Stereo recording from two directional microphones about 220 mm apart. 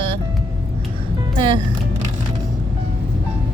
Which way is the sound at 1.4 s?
20° right (ahead or behind).